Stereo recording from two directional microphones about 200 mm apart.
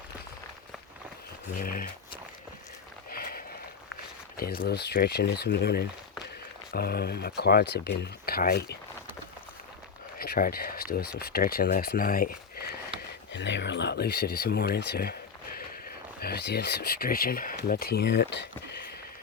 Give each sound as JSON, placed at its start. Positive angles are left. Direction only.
{"t": 1.5, "sound": "speech", "side_deg": 45}
{"t": 3.1, "sound": "a sound", "side_deg": 50}
{"t": 4.4, "sound": "speech", "side_deg": 45}
{"t": 10.2, "sound": "speech", "side_deg": 45}
{"t": 13.3, "sound": "speech", "side_deg": 65}
{"t": 16.2, "sound": "speech", "side_deg": 55}